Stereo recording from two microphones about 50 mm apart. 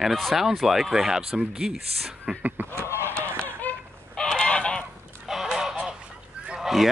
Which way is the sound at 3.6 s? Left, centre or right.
Left.